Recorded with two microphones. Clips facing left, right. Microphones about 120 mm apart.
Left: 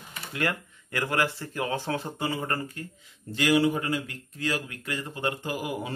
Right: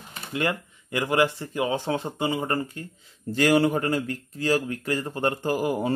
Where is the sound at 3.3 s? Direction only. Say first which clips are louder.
Right 3 dB; 45° right (ahead or behind).